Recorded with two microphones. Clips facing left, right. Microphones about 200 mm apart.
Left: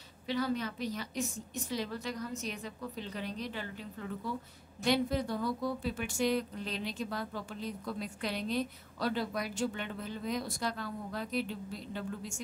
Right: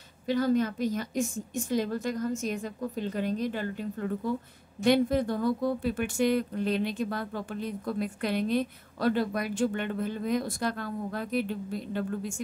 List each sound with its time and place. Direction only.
0.3 s a woman's voice: 45° right (ahead or behind)